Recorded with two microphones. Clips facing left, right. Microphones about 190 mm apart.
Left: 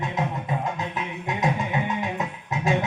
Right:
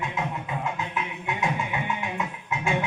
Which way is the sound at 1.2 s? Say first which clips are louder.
Left 4 dB; 35° left (ahead or behind).